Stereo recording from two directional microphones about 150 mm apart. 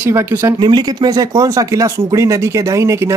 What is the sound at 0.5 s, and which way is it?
Speech, 25° right (ahead or behind).